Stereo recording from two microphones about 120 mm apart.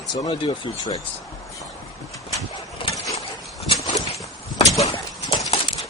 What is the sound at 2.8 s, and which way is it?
Vehicle, 50° left (ahead or behind).